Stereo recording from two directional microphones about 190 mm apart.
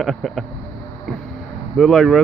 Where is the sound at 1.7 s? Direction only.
Centre (ahead or behind).